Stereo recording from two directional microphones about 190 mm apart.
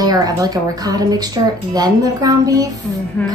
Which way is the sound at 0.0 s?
20° right (ahead or behind).